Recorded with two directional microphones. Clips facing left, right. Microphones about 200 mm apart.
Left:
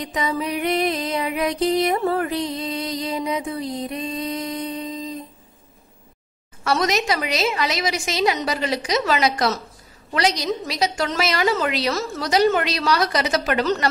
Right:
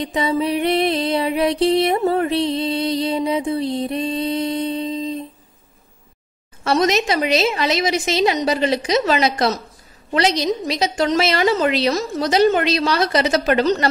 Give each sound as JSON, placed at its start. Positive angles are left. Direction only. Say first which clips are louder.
{"t": 0.0, "sound": "music", "louder": "right 5 dB", "side_deg": -30}
{"t": 6.6, "sound": "a woman's voice", "louder": "right 4 dB", "side_deg": -25}